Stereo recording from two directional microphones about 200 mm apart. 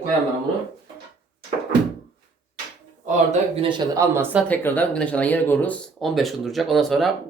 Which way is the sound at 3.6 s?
20° right (ahead or behind).